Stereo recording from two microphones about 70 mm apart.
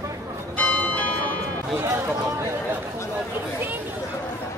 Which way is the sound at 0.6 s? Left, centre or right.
Centre.